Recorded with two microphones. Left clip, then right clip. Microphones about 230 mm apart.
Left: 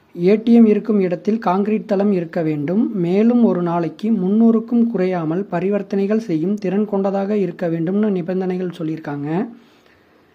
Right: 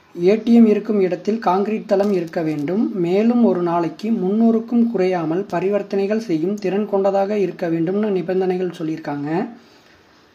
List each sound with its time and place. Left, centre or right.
0.2 s speech: left